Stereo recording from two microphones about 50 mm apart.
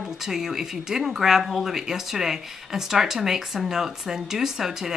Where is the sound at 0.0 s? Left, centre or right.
Centre.